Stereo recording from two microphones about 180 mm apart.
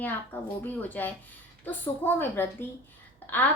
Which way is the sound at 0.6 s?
10° left (ahead or behind).